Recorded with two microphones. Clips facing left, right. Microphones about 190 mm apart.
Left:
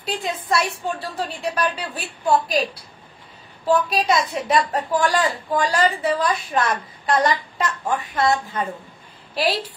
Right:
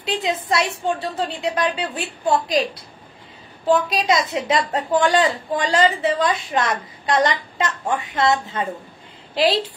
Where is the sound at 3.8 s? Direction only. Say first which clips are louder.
Even; 25° right (ahead or behind).